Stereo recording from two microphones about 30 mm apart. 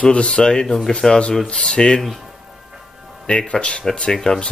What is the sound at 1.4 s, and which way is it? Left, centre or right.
Speech, left.